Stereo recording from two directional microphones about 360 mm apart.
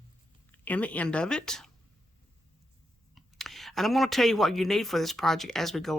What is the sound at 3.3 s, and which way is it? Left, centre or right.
Speech, centre.